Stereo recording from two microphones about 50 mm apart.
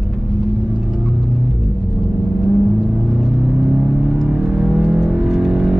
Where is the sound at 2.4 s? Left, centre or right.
Centre.